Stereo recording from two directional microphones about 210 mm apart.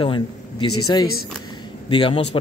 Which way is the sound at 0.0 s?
25° left (ahead or behind).